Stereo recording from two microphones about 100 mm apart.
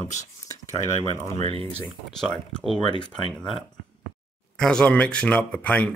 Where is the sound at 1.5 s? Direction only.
70° right (ahead or behind).